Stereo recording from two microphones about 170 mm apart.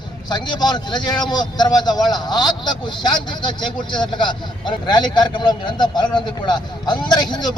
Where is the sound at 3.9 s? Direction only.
25° left (ahead or behind).